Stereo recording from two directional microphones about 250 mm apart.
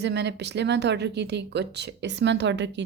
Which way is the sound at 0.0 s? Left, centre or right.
Right.